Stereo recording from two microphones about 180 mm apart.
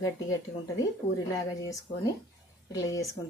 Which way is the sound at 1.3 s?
20° left (ahead or behind).